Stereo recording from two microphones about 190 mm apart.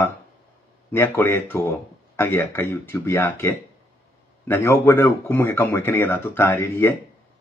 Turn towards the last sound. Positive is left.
turn(degrees=15)  # may be behind; listen again after turning